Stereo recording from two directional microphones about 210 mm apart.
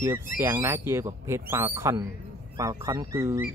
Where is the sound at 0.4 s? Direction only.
10° right (ahead or behind).